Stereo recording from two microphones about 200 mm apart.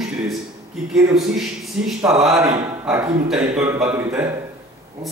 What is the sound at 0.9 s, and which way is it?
A man's voice, centre (ahead or behind).